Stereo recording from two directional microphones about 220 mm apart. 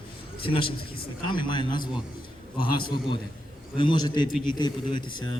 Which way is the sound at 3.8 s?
20° left (ahead or behind).